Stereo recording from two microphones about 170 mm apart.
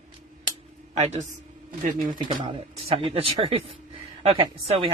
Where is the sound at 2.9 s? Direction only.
35° right (ahead or behind).